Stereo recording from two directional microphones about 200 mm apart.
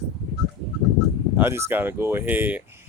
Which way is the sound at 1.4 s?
10° right (ahead or behind).